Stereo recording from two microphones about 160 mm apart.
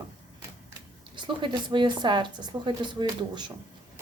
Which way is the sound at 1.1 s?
30° right (ahead or behind).